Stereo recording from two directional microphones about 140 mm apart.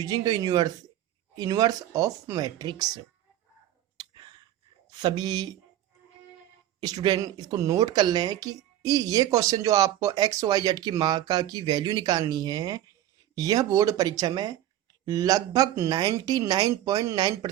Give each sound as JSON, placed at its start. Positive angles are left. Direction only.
{"t": 0.0, "sound": "speech", "side_deg": -30}
{"t": 3.9, "sound": "whispering", "side_deg": -35}
{"t": 4.9, "sound": "speech", "side_deg": -30}
{"t": 6.7, "sound": "speech", "side_deg": -30}